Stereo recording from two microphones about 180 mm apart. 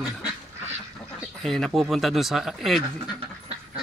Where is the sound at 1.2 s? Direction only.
Centre (ahead or behind).